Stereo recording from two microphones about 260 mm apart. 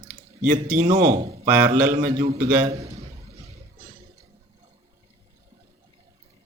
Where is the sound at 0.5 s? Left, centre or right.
Right.